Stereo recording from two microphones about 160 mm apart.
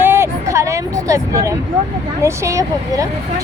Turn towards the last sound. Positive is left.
turn(degrees=-20)  # may be behind; listen again after turning